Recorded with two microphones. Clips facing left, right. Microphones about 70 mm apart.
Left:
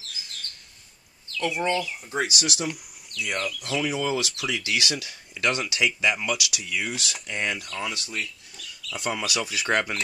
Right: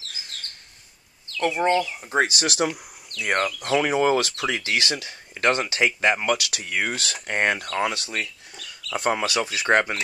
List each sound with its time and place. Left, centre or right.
1.4 s speech: right